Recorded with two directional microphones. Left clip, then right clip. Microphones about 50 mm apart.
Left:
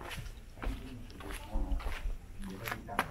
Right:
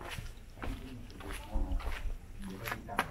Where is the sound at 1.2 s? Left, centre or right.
Left.